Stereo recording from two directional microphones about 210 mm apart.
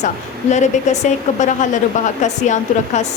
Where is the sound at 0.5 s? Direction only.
35° left (ahead or behind).